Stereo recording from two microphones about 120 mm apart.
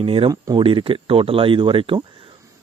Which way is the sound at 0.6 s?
50° right (ahead or behind).